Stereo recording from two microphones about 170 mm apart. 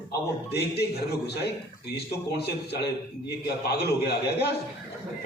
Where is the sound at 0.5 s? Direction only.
75° left (ahead or behind).